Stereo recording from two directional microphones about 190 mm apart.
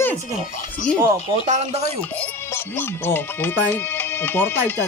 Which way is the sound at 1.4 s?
40° right (ahead or behind).